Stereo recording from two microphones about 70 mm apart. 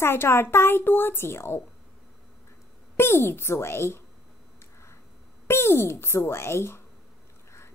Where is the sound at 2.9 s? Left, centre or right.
Left.